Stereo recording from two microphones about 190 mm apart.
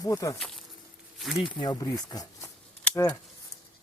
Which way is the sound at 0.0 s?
20° left (ahead or behind).